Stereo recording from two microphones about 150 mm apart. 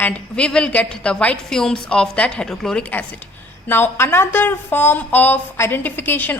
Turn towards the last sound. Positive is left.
turn(degrees=15)  # may be behind; listen again after turning